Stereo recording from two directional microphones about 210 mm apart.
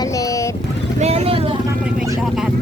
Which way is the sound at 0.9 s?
30° right (ahead or behind).